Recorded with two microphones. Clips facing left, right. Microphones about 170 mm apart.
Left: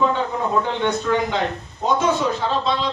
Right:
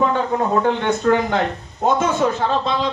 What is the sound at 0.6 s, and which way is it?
Speech, 50° right (ahead or behind).